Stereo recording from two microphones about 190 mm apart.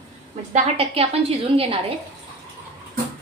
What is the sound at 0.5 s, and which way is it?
Speech, 35° right (ahead or behind).